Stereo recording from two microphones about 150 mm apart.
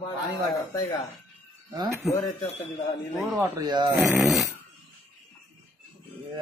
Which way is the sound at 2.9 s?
Centre (ahead or behind).